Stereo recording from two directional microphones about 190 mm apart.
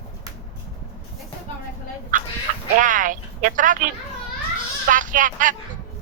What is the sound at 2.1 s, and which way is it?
Fowl, 45° right (ahead or behind).